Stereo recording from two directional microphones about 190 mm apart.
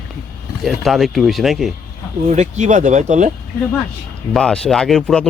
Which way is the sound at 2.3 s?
40° right (ahead or behind).